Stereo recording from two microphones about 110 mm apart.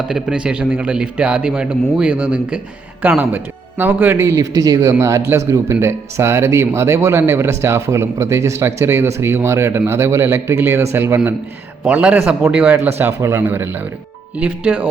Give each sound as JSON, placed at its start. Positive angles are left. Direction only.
{"t": 0.1, "sound": "a man's voice", "side_deg": -10}